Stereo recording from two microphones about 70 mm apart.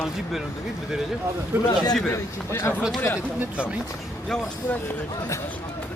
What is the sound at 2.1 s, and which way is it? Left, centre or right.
Speech, left.